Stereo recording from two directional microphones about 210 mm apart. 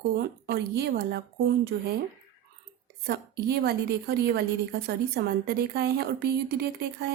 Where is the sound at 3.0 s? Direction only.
50° right (ahead or behind).